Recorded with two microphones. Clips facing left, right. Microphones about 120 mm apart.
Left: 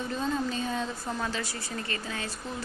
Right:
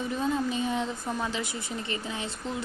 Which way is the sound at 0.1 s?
15° right (ahead or behind).